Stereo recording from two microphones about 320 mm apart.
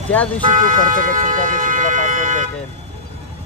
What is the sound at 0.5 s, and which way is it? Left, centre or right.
Speech, right.